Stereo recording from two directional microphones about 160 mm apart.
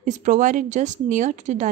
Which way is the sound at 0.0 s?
50° right (ahead or behind).